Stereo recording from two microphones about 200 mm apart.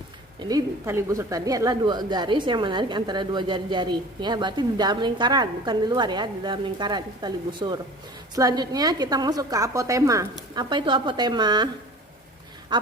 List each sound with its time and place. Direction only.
0.4 s a woman's voice: 15° right (ahead or behind)
12.7 s a woman's voice: 20° right (ahead or behind)